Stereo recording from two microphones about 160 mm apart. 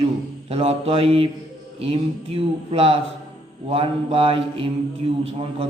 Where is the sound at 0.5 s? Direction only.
35° right (ahead or behind).